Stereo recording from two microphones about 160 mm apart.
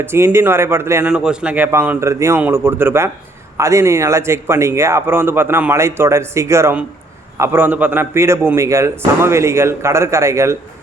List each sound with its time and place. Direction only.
0.0 s a man's voice: 15° right (ahead or behind)
1.0 s a man's voice: 5° right (ahead or behind)